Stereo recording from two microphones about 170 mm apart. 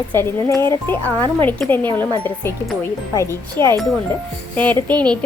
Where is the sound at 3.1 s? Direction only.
15° left (ahead or behind).